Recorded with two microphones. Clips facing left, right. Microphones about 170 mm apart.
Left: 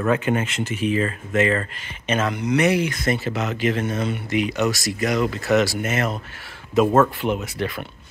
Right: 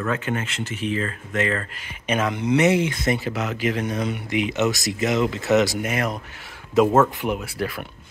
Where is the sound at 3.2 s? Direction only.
10° right (ahead or behind).